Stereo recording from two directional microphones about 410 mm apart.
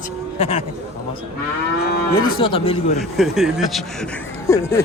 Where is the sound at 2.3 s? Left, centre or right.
Centre.